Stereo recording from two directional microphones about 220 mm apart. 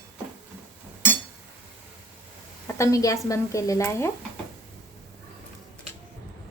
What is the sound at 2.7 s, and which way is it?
Speech, 15° left (ahead or behind).